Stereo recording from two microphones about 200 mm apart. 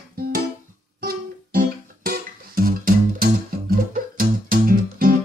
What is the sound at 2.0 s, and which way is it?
Music, 45° right (ahead or behind).